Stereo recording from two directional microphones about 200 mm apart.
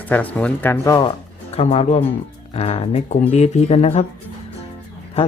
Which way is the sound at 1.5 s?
35° left (ahead or behind).